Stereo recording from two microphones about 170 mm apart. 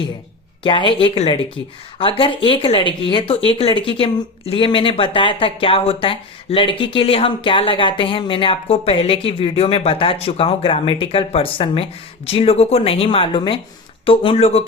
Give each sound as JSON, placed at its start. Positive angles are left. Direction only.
{"t": 0.6, "sound": "speech", "side_deg": 30}